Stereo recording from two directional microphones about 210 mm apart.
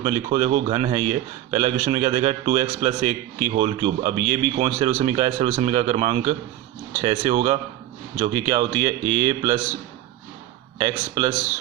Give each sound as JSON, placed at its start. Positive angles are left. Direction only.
{"t": 0.0, "sound": "a man's voice", "side_deg": -25}
{"t": 10.8, "sound": "a man's voice", "side_deg": -20}